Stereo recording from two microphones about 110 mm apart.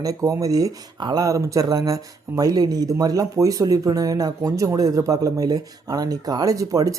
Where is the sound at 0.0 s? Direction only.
30° right (ahead or behind).